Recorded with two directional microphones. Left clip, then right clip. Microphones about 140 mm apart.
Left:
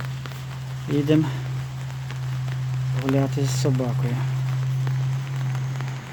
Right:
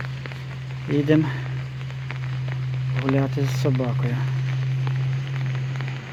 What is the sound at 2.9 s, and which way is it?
Speech, 25° left (ahead or behind).